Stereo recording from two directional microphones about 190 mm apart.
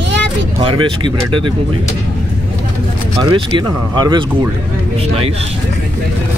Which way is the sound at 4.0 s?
25° right (ahead or behind).